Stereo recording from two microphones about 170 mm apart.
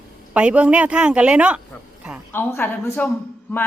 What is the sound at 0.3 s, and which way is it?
A woman's voice, 5° right (ahead or behind).